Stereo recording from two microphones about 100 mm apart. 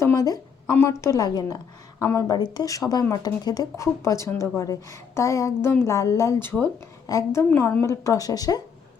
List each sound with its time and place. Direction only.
0.7 s a woman's voice: 25° left (ahead or behind)
7.1 s speech: 35° left (ahead or behind)
7.5 s speech: 25° left (ahead or behind)